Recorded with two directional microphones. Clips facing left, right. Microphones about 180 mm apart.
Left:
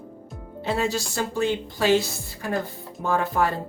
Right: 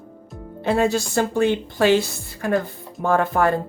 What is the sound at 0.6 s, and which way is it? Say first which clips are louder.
Speech: right 6 dB; 55° right (ahead or behind).